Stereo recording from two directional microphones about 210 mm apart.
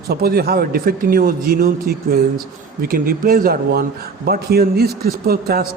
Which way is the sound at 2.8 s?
45° right (ahead or behind).